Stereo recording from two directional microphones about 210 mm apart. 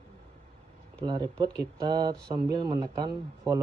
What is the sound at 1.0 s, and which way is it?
Speech, 20° right (ahead or behind).